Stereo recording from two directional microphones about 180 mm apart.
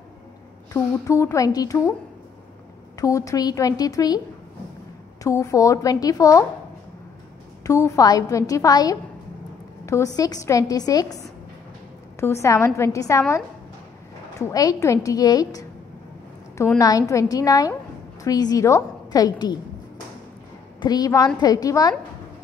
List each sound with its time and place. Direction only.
0.7 s speech: 15° left (ahead or behind)
3.0 s a woman's voice: 20° left (ahead or behind)
5.2 s a woman's voice: 15° left (ahead or behind)
7.6 s a woman's voice: 15° left (ahead or behind)
12.2 s speech: 15° left (ahead or behind)
14.5 s a woman's voice: 20° left (ahead or behind)
20.8 s a woman's voice: 20° left (ahead or behind)